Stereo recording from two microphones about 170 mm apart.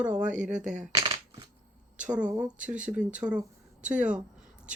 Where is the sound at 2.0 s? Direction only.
5° right (ahead or behind).